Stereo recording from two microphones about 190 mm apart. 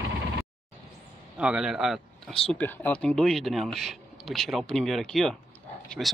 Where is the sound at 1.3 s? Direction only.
5° right (ahead or behind).